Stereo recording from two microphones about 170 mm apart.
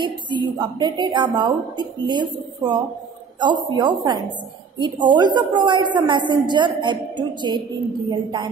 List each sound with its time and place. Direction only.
0.0 s a woman's voice: 25° right (ahead or behind)